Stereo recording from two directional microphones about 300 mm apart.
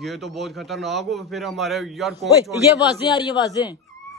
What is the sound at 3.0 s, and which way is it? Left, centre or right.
Speech, centre.